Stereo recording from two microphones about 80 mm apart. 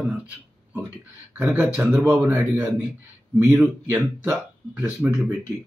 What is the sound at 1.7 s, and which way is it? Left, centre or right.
Speech, centre.